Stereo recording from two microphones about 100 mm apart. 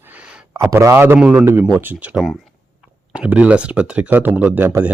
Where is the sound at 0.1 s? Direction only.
10° right (ahead or behind).